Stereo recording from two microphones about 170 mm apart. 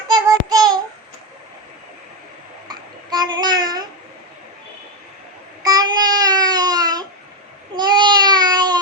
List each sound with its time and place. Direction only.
0.1 s child singing: 25° right (ahead or behind)
2.6 s babbling: 25° right (ahead or behind)
5.6 s child singing: 25° right (ahead or behind)
7.8 s a sound: 25° right (ahead or behind)